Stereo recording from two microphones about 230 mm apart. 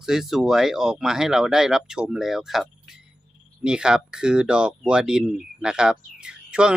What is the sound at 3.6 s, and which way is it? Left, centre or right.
Speech, centre.